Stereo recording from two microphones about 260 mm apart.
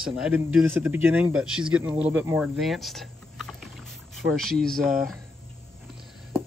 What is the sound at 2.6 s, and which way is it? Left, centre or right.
Typing, centre.